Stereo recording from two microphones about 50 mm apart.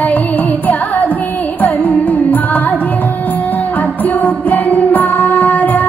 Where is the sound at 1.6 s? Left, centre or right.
Left.